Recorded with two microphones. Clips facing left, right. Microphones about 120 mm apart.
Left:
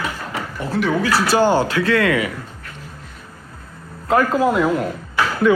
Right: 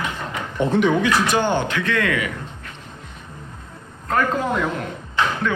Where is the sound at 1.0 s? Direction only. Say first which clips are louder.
Left 3 dB; 35° left (ahead or behind).